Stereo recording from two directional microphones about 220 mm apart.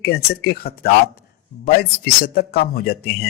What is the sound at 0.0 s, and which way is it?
Speech, 45° left (ahead or behind).